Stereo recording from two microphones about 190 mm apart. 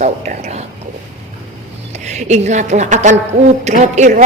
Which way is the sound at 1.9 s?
35° right (ahead or behind).